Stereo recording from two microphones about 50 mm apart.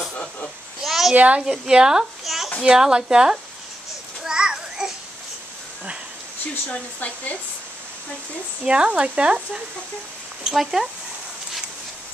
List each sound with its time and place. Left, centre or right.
0.1 s a sound: left
0.8 s a sound: centre
1.1 s speech: right
1.4 s speech: centre
2.2 s a sound: centre
2.6 s speech: centre
4.2 s children playing: centre
6.7 s speech: left
8.6 s speech: right
10.4 s speech: centre